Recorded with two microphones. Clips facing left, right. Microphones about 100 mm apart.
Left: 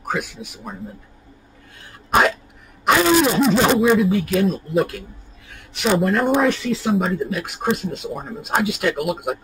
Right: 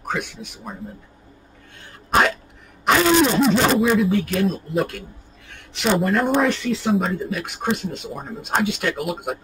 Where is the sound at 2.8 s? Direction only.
5° left (ahead or behind).